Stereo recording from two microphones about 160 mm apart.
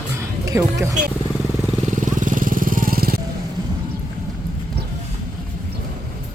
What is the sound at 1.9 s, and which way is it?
Vehicle, 55° right (ahead or behind).